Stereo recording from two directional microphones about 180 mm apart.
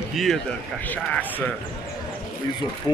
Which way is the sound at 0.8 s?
10° left (ahead or behind).